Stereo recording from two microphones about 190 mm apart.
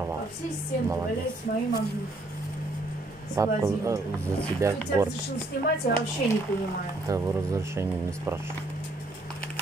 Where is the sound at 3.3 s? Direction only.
15° right (ahead or behind).